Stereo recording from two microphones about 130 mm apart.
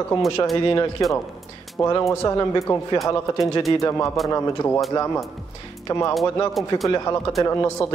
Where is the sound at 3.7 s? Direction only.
25° left (ahead or behind).